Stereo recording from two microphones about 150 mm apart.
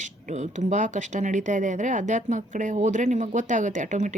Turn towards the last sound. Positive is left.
turn(degrees=-55)  # may be behind; listen again after turning